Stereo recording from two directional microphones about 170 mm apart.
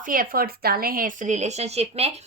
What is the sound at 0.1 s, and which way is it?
Speech, 55° right (ahead or behind).